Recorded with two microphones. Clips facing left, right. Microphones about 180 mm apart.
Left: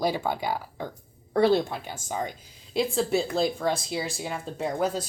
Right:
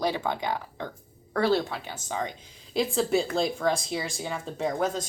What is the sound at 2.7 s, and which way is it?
Speech, centre (ahead or behind).